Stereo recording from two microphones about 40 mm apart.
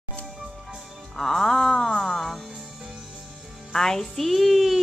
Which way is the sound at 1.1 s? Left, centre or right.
Centre.